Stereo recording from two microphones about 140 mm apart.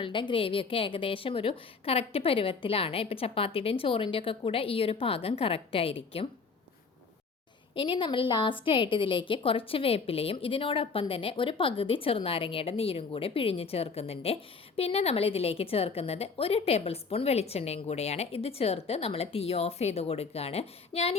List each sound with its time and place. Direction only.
0.0 s a woman's voice: 35° left (ahead or behind)
7.8 s a woman's voice: 35° left (ahead or behind)